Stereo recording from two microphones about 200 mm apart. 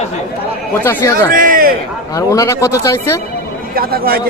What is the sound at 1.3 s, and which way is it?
Speech, 45° right (ahead or behind).